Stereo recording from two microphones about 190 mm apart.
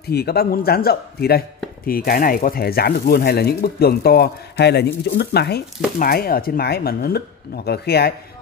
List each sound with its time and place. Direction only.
0.1 s speech: 55° left (ahead or behind)